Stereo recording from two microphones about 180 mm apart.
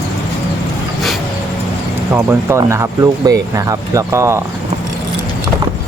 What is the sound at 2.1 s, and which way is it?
Speech, 15° right (ahead or behind).